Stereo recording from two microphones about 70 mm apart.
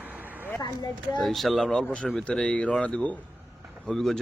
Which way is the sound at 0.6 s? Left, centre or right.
Left.